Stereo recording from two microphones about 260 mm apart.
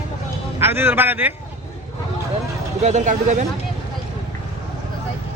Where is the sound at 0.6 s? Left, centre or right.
Centre.